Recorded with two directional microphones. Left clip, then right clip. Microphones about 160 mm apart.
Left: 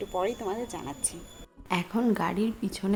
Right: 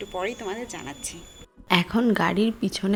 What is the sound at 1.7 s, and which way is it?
Speech, 25° right (ahead or behind).